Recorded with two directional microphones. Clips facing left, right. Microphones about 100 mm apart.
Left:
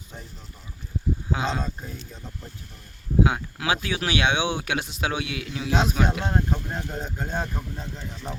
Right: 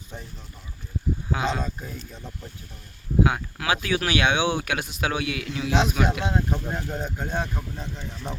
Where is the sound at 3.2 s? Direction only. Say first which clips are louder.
Even; 20° left (ahead or behind).